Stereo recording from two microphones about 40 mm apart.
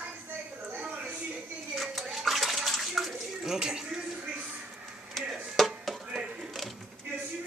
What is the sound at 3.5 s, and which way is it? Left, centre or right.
Speech, centre.